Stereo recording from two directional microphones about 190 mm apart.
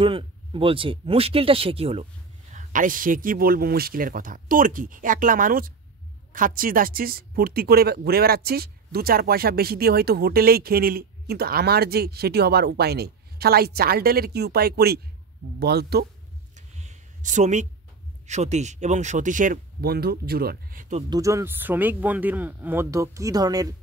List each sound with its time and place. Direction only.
0.0 s speech: 30° right (ahead or behind)
2.5 s speech: 45° right (ahead or behind)
16.5 s a sound: 40° right (ahead or behind)
18.2 s speech: 35° right (ahead or behind); by 20.8 s 55° right (ahead or behind)
21.1 s speech: 15° right (ahead or behind)